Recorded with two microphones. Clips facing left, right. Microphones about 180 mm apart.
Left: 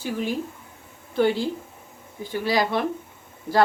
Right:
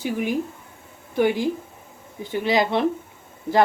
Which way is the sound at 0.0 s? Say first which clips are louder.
Right 3 dB; 15° right (ahead or behind).